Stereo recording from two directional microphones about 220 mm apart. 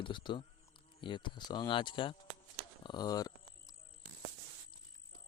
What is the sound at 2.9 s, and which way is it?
Speech, 20° left (ahead or behind).